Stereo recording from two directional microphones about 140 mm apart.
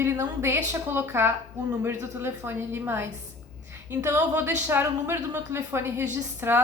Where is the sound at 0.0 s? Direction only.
20° right (ahead or behind).